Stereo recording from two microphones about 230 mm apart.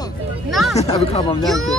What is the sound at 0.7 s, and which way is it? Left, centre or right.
Speech, left.